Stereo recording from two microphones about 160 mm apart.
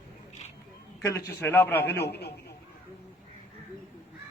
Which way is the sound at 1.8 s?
90° left.